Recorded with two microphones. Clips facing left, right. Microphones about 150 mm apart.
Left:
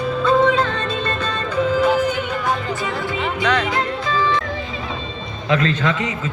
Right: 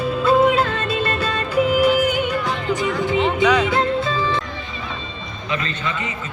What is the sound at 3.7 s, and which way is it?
Music, 25° right (ahead or behind).